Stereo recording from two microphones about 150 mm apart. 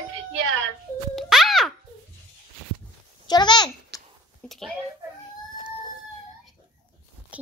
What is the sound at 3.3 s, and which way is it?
Speech, 30° left (ahead or behind).